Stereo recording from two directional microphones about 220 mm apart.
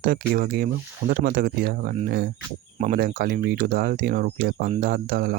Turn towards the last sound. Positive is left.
turn(degrees=-45)  # may be behind; listen again after turning